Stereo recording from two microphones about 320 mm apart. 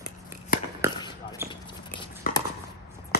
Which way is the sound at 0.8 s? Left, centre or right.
Centre.